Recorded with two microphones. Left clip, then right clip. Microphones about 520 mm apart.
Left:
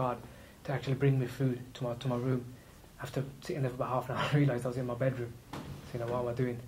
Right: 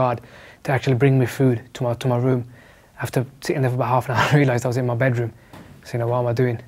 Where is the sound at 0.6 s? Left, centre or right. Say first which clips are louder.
Right 14 dB; right.